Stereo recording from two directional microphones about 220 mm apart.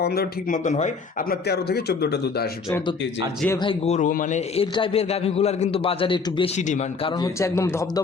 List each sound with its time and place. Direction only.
0.0 s speech: 45° left (ahead or behind)
1.5 s speech: 45° left (ahead or behind)
3.6 s a man's voice: 25° left (ahead or behind)
6.6 s speech: 30° left (ahead or behind); by 8.0 s 10° left (ahead or behind)